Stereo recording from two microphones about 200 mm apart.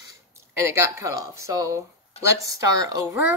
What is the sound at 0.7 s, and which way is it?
Speech, 15° right (ahead or behind).